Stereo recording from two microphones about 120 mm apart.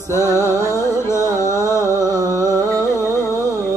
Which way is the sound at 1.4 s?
25° left (ahead or behind).